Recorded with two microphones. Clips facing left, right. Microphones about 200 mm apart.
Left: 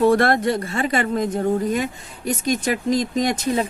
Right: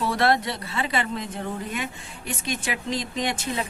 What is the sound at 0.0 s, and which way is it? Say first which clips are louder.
Speech: left 7 dB; 50° left (ahead or behind).